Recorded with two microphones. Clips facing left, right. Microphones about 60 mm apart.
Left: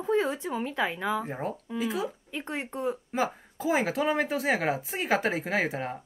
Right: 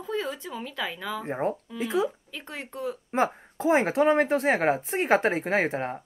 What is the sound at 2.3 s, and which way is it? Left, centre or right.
Speech, left.